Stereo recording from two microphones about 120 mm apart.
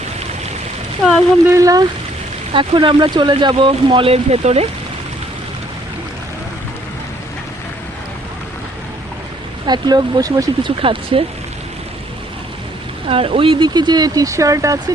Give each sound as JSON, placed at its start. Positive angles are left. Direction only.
{"t": 1.0, "sound": "speech", "side_deg": 0}
{"t": 1.5, "sound": "speech", "side_deg": -25}
{"t": 2.5, "sound": "speech", "side_deg": -45}
{"t": 9.6, "sound": "speech", "side_deg": -35}
{"t": 10.6, "sound": "speech", "side_deg": -50}
{"t": 13.1, "sound": "speech", "side_deg": -50}